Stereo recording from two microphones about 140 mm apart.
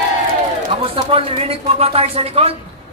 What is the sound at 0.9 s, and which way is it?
A woman's voice, 40° right (ahead or behind).